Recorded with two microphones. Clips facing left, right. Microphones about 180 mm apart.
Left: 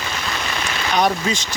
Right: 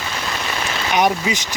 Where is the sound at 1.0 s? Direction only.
15° right (ahead or behind).